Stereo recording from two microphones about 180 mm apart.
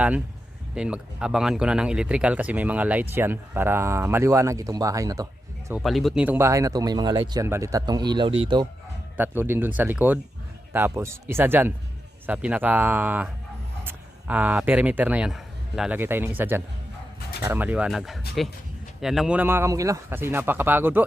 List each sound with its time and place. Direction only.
0.8 s speech: 5° right (ahead or behind)
5.7 s speech: centre (ahead or behind); by 8.6 s 25° right (ahead or behind)
9.1 s speech: 10° right (ahead or behind)